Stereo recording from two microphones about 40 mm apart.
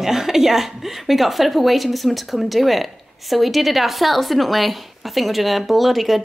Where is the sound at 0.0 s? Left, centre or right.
Centre.